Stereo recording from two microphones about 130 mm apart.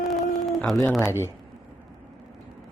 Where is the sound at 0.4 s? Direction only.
Centre (ahead or behind).